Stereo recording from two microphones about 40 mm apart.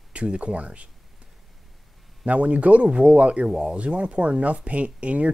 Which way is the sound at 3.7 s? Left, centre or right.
Right.